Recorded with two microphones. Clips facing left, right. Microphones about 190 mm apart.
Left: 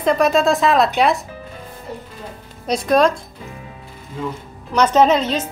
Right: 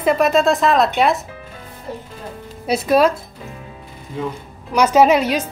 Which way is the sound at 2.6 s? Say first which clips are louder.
Right 1 dB; 5° right (ahead or behind).